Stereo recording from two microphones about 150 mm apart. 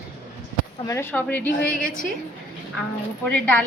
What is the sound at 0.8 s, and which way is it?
A woman's voice, 20° left (ahead or behind).